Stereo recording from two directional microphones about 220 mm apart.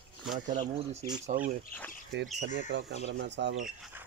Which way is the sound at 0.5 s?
20° right (ahead or behind).